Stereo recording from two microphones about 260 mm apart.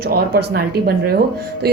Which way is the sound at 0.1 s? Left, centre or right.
Right.